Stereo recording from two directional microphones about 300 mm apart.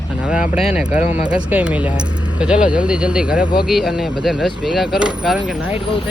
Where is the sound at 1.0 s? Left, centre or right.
Left.